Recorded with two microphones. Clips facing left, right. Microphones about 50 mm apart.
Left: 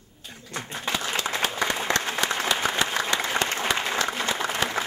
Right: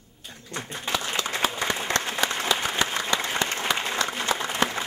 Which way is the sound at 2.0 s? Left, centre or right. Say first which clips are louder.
Even; left.